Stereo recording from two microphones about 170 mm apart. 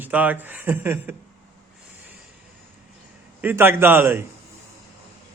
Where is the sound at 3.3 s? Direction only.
10° right (ahead or behind).